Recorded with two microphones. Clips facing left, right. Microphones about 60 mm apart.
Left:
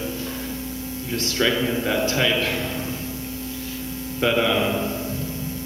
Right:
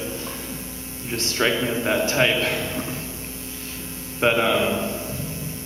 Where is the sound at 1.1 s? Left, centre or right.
Right.